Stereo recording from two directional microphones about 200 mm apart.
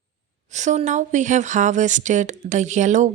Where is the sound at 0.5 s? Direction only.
35° right (ahead or behind).